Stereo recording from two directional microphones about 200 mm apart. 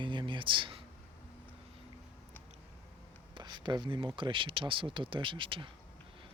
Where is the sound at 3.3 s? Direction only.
25° right (ahead or behind).